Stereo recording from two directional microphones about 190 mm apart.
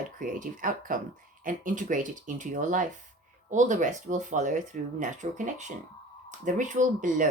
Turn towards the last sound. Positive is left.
turn(degrees=-40)  # may be behind; listen again after turning